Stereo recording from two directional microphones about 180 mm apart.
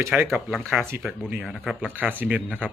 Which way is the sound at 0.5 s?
Centre (ahead or behind).